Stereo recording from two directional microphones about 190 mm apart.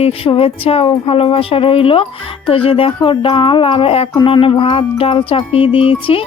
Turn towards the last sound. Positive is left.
turn(degrees=30)  # may be behind; listen again after turning